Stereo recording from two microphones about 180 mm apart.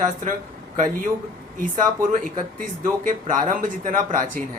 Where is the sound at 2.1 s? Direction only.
50° right (ahead or behind).